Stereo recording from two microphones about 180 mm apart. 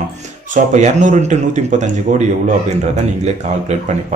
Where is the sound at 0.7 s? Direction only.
40° right (ahead or behind).